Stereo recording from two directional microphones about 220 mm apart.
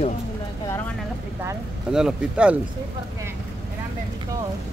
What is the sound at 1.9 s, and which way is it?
Speech, 5° right (ahead or behind).